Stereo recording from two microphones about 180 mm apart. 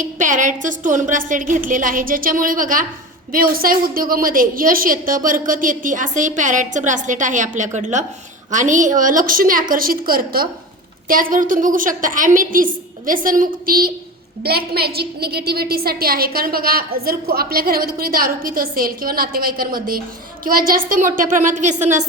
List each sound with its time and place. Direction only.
0.0 s a woman's voice: 45° right (ahead or behind)